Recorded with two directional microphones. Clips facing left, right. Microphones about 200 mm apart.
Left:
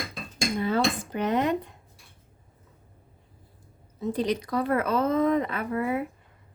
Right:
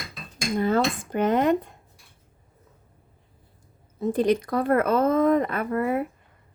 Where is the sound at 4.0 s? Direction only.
50° right (ahead or behind).